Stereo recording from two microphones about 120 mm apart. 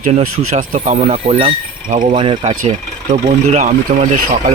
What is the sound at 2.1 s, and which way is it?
Speech, 45° right (ahead or behind).